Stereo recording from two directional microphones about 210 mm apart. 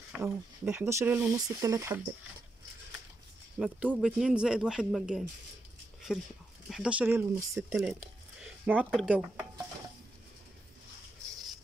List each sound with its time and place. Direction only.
0.1 s speech: 10° right (ahead or behind)
3.5 s speech: 5° right (ahead or behind)
7.9 s a sound: 10° right (ahead or behind)
8.7 s speech: 5° right (ahead or behind)